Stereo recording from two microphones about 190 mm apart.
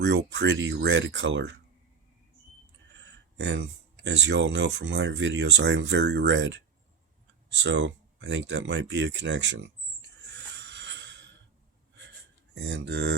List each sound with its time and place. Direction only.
0.0 s speech: 70° right (ahead or behind)
3.3 s speech: 70° right (ahead or behind)
10.6 s a sound: 70° right (ahead or behind)
12.5 s speech: 70° right (ahead or behind)